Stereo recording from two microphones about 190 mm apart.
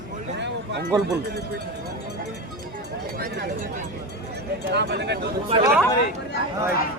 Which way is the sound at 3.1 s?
50° right (ahead or behind).